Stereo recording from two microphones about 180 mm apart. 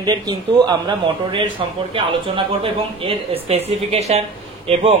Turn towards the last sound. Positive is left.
turn(degrees=-35)  # may be behind; listen again after turning